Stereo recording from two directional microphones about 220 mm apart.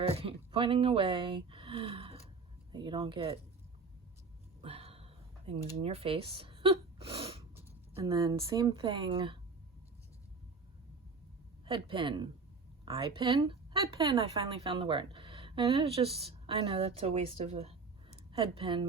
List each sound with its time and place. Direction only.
0.0 s a woman's voice: 25° right (ahead or behind)
4.6 s a sound: 25° right (ahead or behind)
7.9 s a woman's voice: 20° right (ahead or behind)
11.6 s a woman's voice: 20° right (ahead or behind)